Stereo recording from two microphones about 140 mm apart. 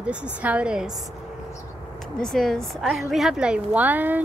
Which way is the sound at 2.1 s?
5° left (ahead or behind).